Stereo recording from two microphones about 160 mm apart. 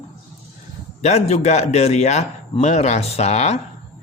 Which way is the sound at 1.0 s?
40° left (ahead or behind).